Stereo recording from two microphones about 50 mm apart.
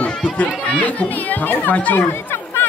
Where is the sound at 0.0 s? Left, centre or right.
Left.